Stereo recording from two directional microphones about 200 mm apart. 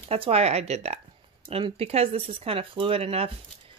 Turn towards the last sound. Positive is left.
turn(degrees=-30)  # may be behind; listen again after turning